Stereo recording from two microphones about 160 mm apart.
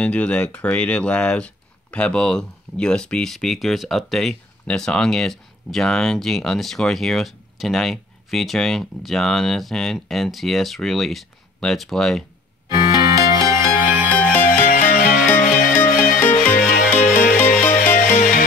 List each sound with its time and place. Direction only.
0.0 s speech: 5° left (ahead or behind)
12.7 s music: 20° right (ahead or behind)
14.5 s music: 60° left (ahead or behind)